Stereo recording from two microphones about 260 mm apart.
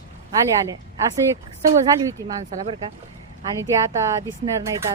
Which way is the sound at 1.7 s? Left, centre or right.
Centre.